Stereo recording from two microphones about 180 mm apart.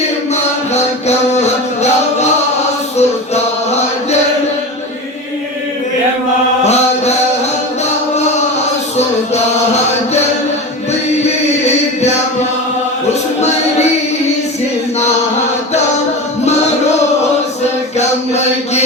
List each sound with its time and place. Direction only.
0.7 s music: 40° left (ahead or behind)
6.7 s mantra: 35° left (ahead or behind)
17.9 s mantra: 40° left (ahead or behind)